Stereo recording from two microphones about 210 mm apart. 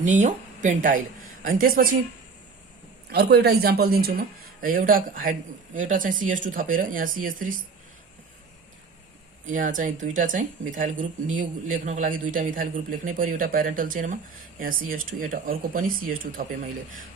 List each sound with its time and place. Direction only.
0.0 s speech: 35° right (ahead or behind)
3.1 s speech: 50° right (ahead or behind)
9.5 s speech: 40° right (ahead or behind)